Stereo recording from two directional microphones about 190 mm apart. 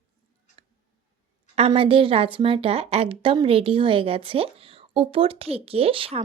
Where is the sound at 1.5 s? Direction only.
30° right (ahead or behind).